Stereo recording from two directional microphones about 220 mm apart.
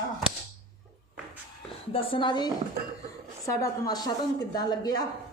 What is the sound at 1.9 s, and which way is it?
A woman's voice, 25° left (ahead or behind).